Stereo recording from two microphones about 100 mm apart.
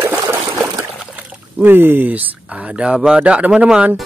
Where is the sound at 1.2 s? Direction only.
15° right (ahead or behind).